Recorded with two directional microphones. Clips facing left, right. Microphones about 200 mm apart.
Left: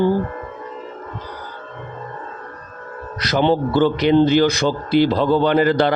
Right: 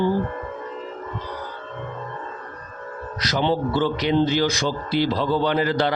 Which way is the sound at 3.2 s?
55° left (ahead or behind).